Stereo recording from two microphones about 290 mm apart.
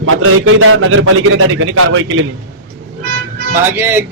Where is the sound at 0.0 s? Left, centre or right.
Right.